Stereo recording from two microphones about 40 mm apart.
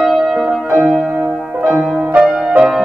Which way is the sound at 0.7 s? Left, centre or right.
Centre.